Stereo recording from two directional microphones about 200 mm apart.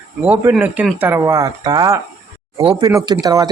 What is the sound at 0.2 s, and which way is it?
Speech, 5° right (ahead or behind).